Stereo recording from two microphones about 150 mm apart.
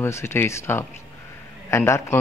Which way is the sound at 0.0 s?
15° left (ahead or behind).